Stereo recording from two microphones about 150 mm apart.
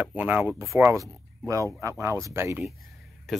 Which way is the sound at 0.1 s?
10° right (ahead or behind).